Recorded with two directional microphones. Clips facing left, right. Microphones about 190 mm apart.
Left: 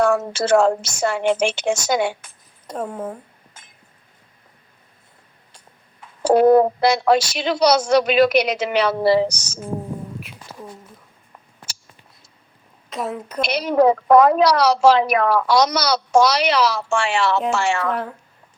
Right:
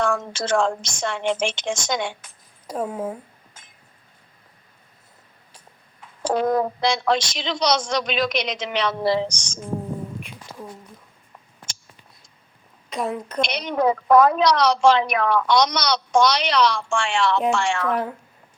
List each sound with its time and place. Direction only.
0.0 s a woman's voice: 5° left (ahead or behind)
2.6 s speech: 5° right (ahead or behind)
6.5 s speech: 30° left (ahead or behind)
6.8 s a woman's voice: 5° left (ahead or behind)
10.2 s a sound: 5° left (ahead or behind)
12.9 s a woman's voice: centre (ahead or behind)